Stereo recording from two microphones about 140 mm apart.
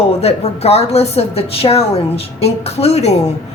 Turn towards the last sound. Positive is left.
turn(degrees=50)  # may be behind; listen again after turning